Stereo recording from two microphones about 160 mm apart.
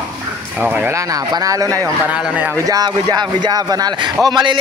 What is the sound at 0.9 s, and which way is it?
Speech, 20° right (ahead or behind).